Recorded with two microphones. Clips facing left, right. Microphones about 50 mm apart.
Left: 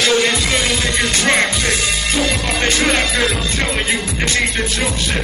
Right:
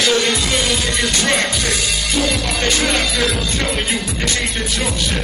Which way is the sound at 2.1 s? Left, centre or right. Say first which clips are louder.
Even; left.